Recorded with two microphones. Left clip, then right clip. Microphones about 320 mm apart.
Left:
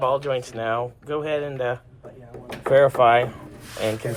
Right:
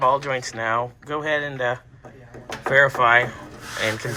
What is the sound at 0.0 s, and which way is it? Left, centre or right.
Speech, centre.